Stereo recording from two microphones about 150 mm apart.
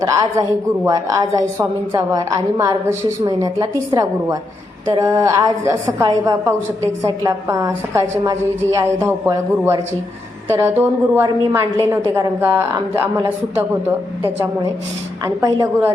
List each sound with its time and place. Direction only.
0.0 s a woman's voice: 25° right (ahead or behind)
15.2 s a woman's voice: 20° right (ahead or behind)